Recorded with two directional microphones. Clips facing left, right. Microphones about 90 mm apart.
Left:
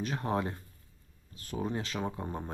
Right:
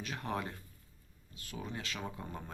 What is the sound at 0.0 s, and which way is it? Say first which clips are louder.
Speech: left 6 dB; 35° left (ahead or behind).